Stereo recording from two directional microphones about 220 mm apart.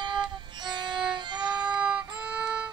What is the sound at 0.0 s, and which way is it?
Music, 20° right (ahead or behind).